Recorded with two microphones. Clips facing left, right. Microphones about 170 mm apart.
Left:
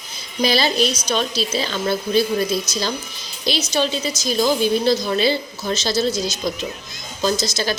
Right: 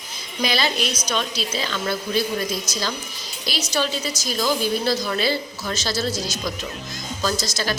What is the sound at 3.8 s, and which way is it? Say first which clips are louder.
A woman's voice: left 1 dB; 25° left (ahead or behind).